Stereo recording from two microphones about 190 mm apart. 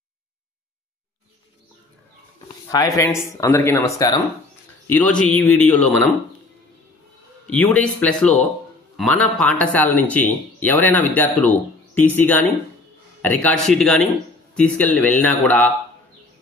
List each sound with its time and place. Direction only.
2.7 s speech: 15° left (ahead or behind)
7.5 s speech: 5° left (ahead or behind)